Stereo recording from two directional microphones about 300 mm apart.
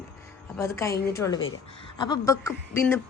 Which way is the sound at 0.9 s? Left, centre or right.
Left.